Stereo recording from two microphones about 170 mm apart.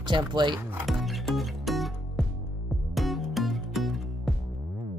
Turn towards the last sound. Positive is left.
turn(degrees=0)  # may be behind; listen again after turning